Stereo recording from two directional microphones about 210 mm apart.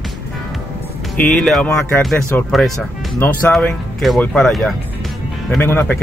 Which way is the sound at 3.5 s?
Centre (ahead or behind).